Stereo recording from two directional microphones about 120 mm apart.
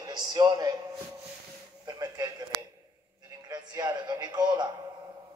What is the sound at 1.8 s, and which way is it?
Speech, 30° right (ahead or behind).